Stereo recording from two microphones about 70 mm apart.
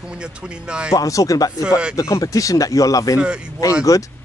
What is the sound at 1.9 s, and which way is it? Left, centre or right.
Speech, left.